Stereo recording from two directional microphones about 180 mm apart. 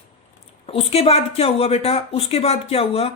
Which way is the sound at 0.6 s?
35° left (ahead or behind).